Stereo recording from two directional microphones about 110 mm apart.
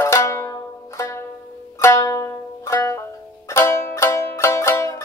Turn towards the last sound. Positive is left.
turn(degrees=25)  # may be behind; listen again after turning